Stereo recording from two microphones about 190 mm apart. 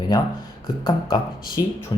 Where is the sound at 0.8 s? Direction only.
20° left (ahead or behind).